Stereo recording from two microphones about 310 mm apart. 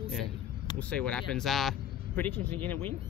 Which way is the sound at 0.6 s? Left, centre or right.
Centre.